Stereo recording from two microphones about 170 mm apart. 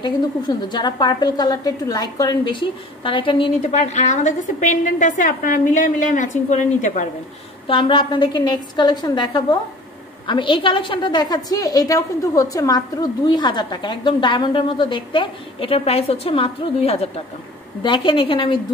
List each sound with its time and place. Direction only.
0.0 s a woman's voice: 25° left (ahead or behind)
3.7 s a woman's voice: 45° left (ahead or behind)
7.6 s a woman's voice: 30° left (ahead or behind)